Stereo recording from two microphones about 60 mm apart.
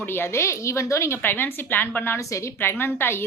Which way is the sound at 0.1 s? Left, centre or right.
Left.